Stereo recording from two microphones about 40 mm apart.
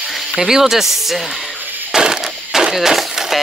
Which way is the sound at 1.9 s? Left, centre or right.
Centre.